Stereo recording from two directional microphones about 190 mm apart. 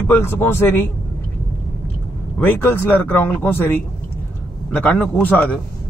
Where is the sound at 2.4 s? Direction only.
10° left (ahead or behind).